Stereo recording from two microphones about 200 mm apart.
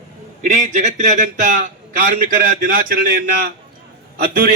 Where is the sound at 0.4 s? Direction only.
35° right (ahead or behind).